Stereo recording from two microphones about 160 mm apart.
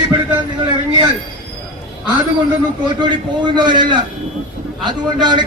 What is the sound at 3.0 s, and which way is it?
A man's voice, 30° right (ahead or behind).